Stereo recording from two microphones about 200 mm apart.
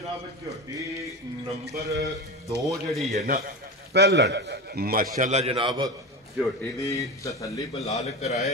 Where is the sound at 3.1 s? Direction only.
45° right (ahead or behind); by 5.8 s 25° right (ahead or behind).